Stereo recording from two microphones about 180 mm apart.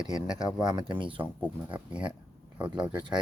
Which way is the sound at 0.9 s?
30° right (ahead or behind).